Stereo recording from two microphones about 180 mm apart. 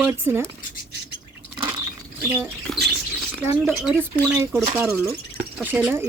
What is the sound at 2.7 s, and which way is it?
Rodents, 5° left (ahead or behind).